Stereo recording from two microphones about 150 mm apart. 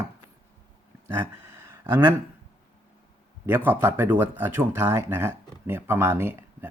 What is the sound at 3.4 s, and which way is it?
Speech, 15° right (ahead or behind).